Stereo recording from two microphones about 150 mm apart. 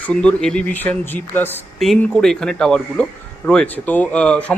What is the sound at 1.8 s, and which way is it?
A man's voice, centre (ahead or behind).